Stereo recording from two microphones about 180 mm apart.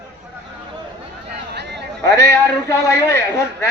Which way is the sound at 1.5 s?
70° right (ahead or behind).